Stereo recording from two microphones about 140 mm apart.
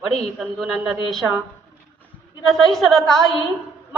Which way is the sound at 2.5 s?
Centre (ahead or behind).